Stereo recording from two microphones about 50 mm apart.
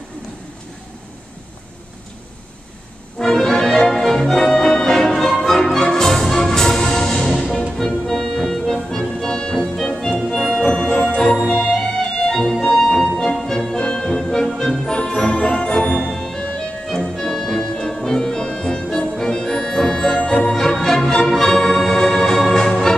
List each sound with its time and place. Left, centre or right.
3.2 s music: centre
7.3 s music: centre
7.7 s music: centre